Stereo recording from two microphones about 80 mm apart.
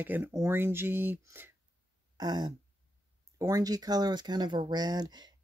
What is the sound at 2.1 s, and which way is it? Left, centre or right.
Speech, right.